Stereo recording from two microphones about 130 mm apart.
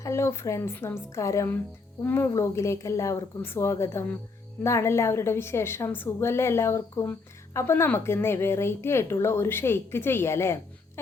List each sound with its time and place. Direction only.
0.0 s a woman's voice: 20° left (ahead or behind)